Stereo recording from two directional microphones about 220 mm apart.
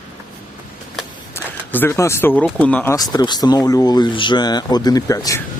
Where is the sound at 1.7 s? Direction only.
10° left (ahead or behind).